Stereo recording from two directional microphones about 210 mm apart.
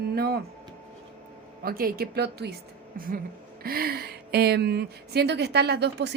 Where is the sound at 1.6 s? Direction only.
45° right (ahead or behind).